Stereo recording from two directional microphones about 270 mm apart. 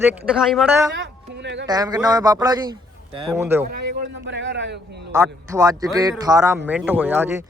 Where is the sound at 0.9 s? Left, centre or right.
Right.